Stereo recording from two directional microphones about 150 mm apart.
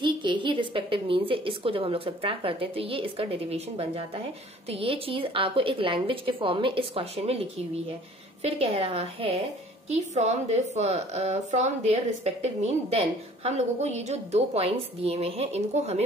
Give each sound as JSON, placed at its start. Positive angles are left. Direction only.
{"t": 0.0, "sound": "a woman's voice", "side_deg": -30}